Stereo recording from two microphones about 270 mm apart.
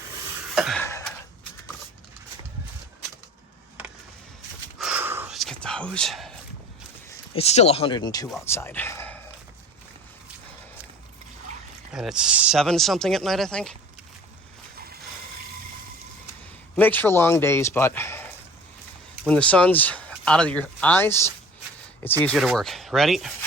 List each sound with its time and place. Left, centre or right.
0.5 s cough: centre
4.8 s whispering: centre
7.3 s speech: left
8.3 s speech: centre
11.9 s speech: centre
16.7 s speech: centre